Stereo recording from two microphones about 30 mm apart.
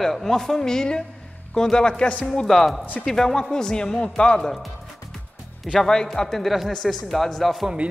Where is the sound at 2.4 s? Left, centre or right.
Centre; by 4.4 s left.